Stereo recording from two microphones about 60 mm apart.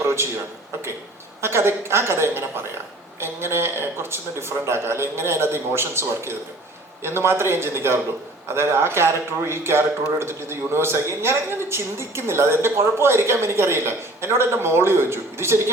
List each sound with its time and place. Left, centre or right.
1.4 s a man's voice: right